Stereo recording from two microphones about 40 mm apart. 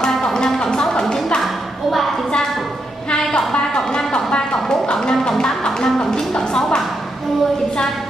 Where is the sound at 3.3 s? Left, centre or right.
Left.